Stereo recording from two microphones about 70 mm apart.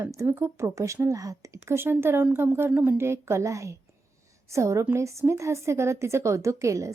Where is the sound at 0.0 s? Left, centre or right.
Right.